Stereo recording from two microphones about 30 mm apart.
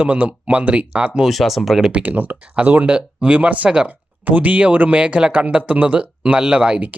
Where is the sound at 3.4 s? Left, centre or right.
Right.